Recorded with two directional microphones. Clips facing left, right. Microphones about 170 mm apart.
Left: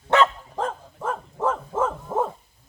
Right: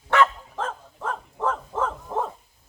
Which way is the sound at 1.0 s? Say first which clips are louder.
Left 2 dB; 5° left (ahead or behind).